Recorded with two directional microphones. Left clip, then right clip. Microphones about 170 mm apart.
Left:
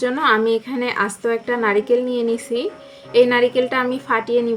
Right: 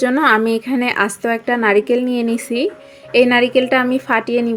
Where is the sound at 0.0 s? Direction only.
40° right (ahead or behind).